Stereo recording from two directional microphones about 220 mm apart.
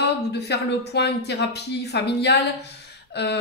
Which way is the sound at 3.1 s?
50° left (ahead or behind).